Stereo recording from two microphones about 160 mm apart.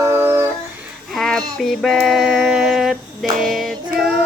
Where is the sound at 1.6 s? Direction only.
Centre (ahead or behind).